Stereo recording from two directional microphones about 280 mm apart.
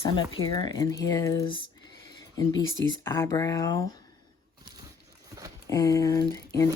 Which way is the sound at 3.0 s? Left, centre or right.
Centre.